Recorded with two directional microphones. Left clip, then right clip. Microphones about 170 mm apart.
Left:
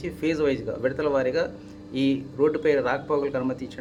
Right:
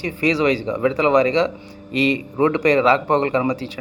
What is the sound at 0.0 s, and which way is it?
Speech, 20° right (ahead or behind).